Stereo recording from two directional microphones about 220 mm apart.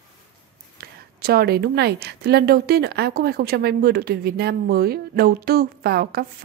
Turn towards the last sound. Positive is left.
turn(degrees=-45)  # may be behind; listen again after turning